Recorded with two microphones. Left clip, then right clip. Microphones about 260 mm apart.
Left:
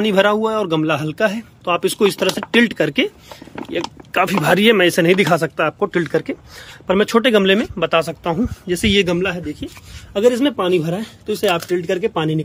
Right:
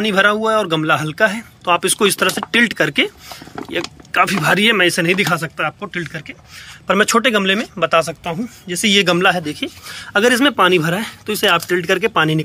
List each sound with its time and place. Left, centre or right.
0.0 s speech: centre
6.9 s speech: centre
9.1 s a man's voice: right
10.1 s speech: centre